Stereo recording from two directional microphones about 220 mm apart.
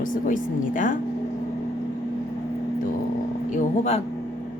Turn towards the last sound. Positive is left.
turn(degrees=30)  # may be behind; listen again after turning